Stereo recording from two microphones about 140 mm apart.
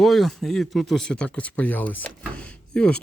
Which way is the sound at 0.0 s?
Centre (ahead or behind).